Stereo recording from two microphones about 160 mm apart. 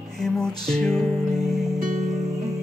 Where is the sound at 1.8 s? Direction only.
55° right (ahead or behind).